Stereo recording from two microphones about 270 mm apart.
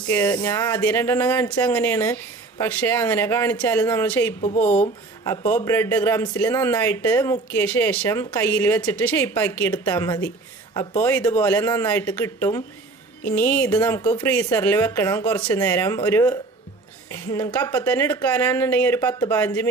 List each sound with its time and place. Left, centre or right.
0.1 s speech: centre
11.0 s speech: centre